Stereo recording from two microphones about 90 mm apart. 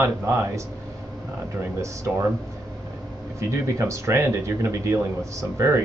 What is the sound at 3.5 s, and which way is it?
A man's voice, 30° right (ahead or behind).